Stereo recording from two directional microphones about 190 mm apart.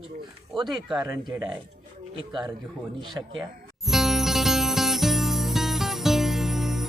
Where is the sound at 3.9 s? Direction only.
Centre (ahead or behind).